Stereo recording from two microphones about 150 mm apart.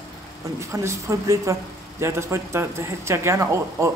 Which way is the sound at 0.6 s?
20° right (ahead or behind).